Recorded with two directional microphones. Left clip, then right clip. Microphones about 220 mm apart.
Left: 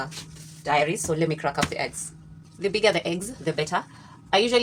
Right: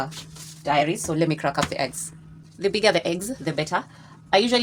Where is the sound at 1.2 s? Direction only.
30° right (ahead or behind).